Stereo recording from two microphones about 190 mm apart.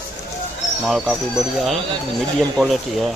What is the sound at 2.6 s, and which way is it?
Speech, centre (ahead or behind).